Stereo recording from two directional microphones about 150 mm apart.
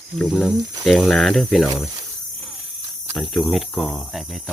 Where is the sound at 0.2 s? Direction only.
Centre (ahead or behind).